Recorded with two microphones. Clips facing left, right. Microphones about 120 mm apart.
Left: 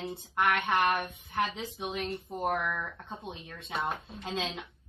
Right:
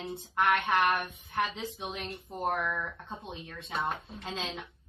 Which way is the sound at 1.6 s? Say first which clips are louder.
Right 3 dB; 25° right (ahead or behind).